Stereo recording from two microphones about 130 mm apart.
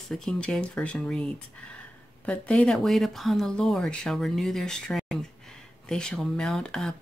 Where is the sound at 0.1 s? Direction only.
5° left (ahead or behind).